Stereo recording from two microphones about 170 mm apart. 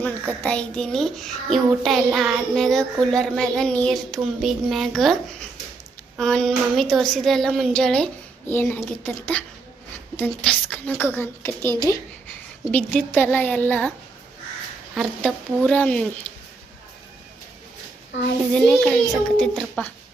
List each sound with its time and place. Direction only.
0.0 s a woman's voice: 10° left (ahead or behind)
14.9 s a woman's voice: centre (ahead or behind)
18.1 s a child's voice: 90° left
18.5 s a woman's voice: 5° left (ahead or behind)